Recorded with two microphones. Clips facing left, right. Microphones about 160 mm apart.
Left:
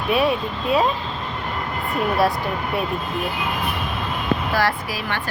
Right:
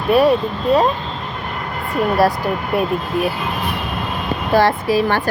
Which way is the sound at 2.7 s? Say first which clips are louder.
Right 7 dB; centre (ahead or behind).